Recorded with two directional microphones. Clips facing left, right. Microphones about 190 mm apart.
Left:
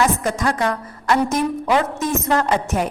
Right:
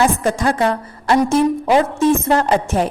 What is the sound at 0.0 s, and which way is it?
A woman's voice, 30° right (ahead or behind).